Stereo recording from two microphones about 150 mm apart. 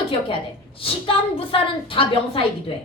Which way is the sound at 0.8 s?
35° left (ahead or behind).